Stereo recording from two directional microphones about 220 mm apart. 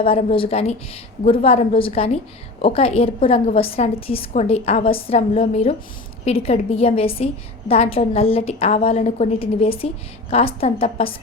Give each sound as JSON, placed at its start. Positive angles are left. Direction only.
{"t": 0.0, "sound": "a woman's voice", "side_deg": 25}